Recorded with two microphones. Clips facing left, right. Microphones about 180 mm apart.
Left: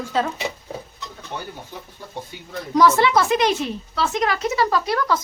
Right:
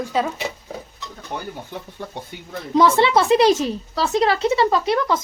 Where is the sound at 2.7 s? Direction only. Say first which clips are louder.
Right 1 dB; 25° right (ahead or behind).